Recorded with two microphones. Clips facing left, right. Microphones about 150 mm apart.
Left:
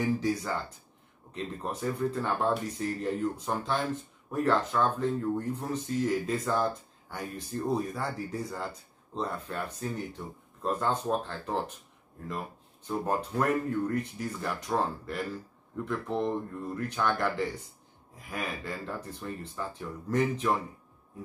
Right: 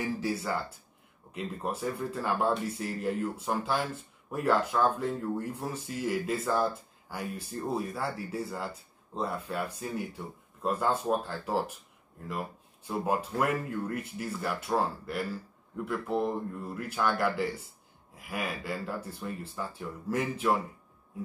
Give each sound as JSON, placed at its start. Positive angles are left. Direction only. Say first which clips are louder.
{"t": 0.0, "sound": "speech", "louder": "left 3 dB", "side_deg": -5}